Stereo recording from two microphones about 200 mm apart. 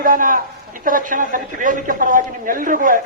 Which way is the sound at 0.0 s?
45° right (ahead or behind).